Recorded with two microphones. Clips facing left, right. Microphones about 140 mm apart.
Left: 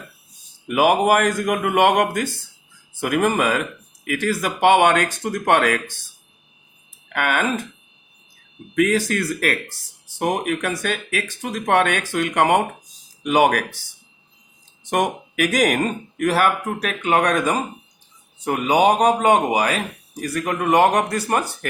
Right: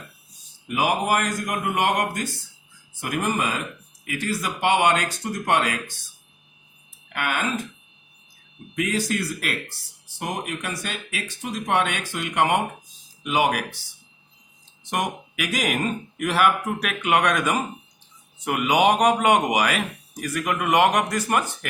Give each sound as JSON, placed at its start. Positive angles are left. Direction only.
{"t": 0.7, "sound": "speech", "side_deg": 55}
{"t": 7.1, "sound": "speech", "side_deg": 55}
{"t": 8.7, "sound": "speech", "side_deg": 55}
{"t": 14.8, "sound": "a man's voice", "side_deg": 50}